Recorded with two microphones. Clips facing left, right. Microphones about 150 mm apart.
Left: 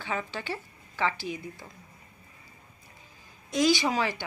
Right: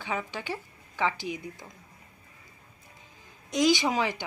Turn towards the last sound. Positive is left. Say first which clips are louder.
# even
turn(degrees=-20)  # may be behind; listen again after turning